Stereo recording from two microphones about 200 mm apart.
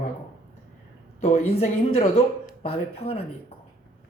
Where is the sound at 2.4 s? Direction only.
30° left (ahead or behind).